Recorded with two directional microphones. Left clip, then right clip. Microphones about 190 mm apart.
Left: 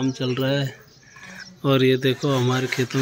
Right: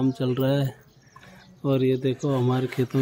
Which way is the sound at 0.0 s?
25° right (ahead or behind).